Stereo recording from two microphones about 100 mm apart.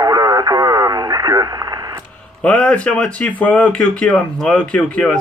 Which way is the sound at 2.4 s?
15° left (ahead or behind).